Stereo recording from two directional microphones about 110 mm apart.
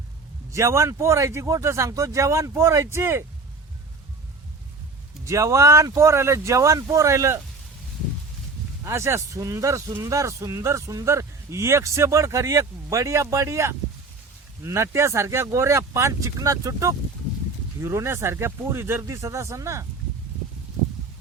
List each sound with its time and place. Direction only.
0.5 s speech: 25° right (ahead or behind)
5.2 s speech: 30° right (ahead or behind)
8.8 s speech: 25° right (ahead or behind)